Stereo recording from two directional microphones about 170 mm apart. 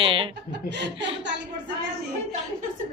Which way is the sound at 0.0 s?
30° right (ahead or behind).